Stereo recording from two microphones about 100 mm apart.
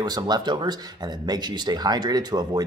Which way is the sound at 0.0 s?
45° right (ahead or behind).